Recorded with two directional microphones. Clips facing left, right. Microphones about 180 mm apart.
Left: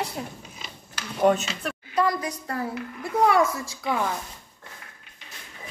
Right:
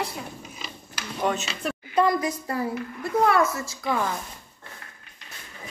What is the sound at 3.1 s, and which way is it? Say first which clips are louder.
Speech: even; 15° left (ahead or behind).